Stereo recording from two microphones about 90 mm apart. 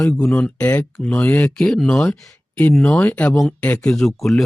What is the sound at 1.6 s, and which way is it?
Speech, 5° left (ahead or behind).